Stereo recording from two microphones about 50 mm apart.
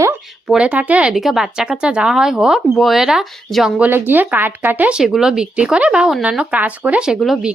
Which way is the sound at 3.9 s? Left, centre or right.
Right.